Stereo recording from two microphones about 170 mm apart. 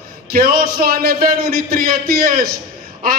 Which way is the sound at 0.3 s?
60° right (ahead or behind).